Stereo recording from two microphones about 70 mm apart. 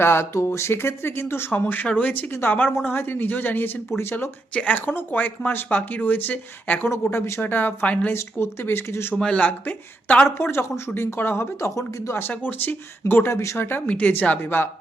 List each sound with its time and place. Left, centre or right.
0.0 s speech: left
4.5 s speech: left
7.1 s speech: left
7.4 s speech: left
8.1 s speech: left
9.1 s speech: centre
10.2 s speech: left
11.7 s speech: left
12.3 s speech: left
13.7 s speech: left